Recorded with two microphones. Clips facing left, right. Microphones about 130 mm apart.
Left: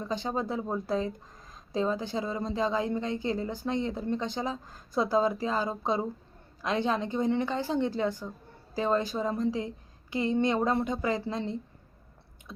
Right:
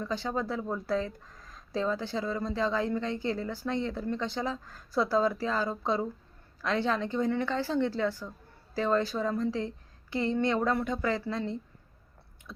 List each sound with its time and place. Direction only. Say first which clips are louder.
0.0 s a woman's voice: left 1 dB; 20° left (ahead or behind)